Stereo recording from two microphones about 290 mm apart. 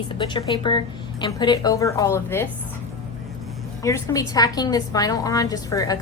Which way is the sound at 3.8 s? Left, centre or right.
Centre.